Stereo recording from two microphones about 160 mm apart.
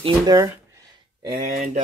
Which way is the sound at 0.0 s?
25° right (ahead or behind).